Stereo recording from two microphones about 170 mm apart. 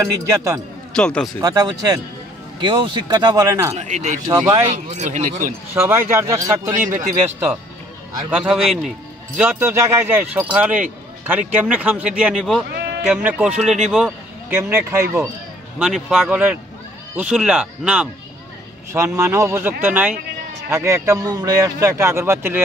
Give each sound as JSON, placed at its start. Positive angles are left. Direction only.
{"t": 0.0, "sound": "speech", "side_deg": -15}
{"t": 0.9, "sound": "speech", "side_deg": 5}
{"t": 1.4, "sound": "speech", "side_deg": -20}
{"t": 3.7, "sound": "speech", "side_deg": -45}
{"t": 4.3, "sound": "speech", "side_deg": -25}
{"t": 4.6, "sound": "speech", "side_deg": -40}
{"t": 5.8, "sound": "speech", "side_deg": -15}
{"t": 14.5, "sound": "speech", "side_deg": -15}
{"t": 15.8, "sound": "speech", "side_deg": -5}
{"t": 19.1, "sound": "speech", "side_deg": -15}